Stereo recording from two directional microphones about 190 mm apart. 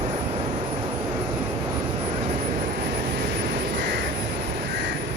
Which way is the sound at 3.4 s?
60° right (ahead or behind).